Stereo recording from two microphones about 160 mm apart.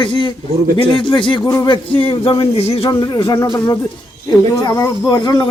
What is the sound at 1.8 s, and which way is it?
Speech, 35° left (ahead or behind).